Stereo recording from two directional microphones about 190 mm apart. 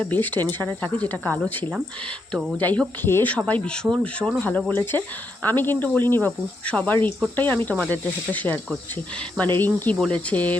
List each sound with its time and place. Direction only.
0.0 s speech: 10° left (ahead or behind)